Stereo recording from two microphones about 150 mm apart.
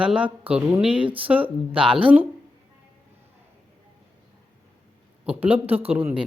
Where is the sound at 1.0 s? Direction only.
35° right (ahead or behind).